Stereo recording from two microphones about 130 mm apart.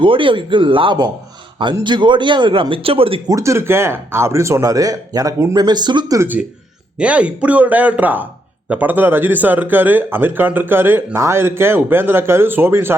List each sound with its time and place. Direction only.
0.0 s a man's voice: 40° right (ahead or behind)
3.2 s a man's voice: 25° right (ahead or behind)
6.1 s speech: 15° right (ahead or behind)